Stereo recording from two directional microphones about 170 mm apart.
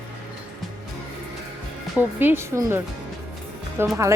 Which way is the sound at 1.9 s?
10° right (ahead or behind).